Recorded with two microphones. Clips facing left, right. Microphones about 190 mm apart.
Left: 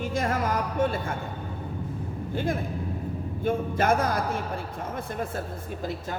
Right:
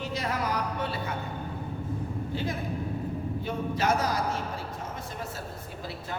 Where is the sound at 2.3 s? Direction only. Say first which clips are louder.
Left 5 dB; 50° left (ahead or behind).